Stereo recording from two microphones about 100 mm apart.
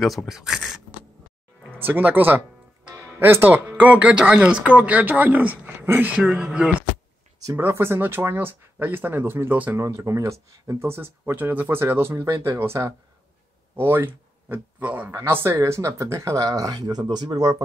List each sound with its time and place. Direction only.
0.3 s speech: 5° right (ahead or behind)
1.8 s speech: 20° right (ahead or behind)
6.1 s speech: 10° right (ahead or behind)
7.5 s speech: 25° right (ahead or behind)
9.8 s speech: 30° right (ahead or behind)